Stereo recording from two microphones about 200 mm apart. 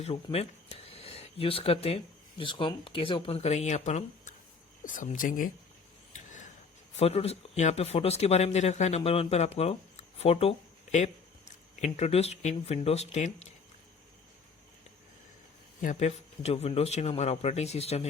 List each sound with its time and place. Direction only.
0.0 s speech: 30° left (ahead or behind)
6.1 s a sound: 40° left (ahead or behind)
6.9 s speech: 30° left (ahead or behind)
15.8 s speech: 35° left (ahead or behind)